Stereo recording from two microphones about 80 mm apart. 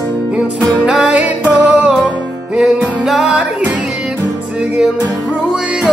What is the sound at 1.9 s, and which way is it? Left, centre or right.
Music, centre.